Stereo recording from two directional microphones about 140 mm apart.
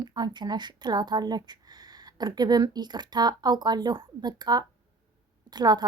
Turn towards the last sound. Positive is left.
turn(degrees=-30)  # may be behind; listen again after turning